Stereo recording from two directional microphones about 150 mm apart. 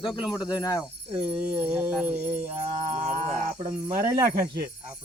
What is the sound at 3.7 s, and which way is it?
Speech, 25° right (ahead or behind).